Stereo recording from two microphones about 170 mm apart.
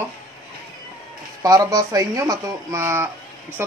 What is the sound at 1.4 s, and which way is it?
A man's voice, 20° right (ahead or behind).